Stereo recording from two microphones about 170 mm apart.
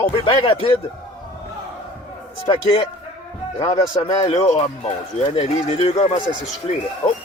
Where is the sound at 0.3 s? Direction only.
30° left (ahead or behind).